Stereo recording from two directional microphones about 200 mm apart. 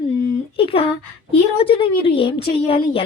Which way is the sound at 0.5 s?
25° left (ahead or behind).